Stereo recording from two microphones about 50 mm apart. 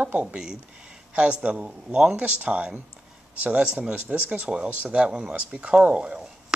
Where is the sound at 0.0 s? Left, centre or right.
Right.